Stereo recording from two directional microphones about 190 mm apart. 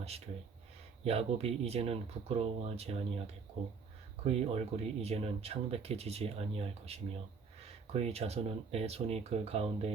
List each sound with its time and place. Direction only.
1.0 s speech: 30° right (ahead or behind)
4.2 s speech: 35° right (ahead or behind)